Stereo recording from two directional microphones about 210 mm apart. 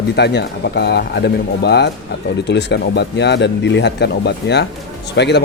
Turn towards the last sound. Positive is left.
turn(degrees=55)  # may be behind; listen again after turning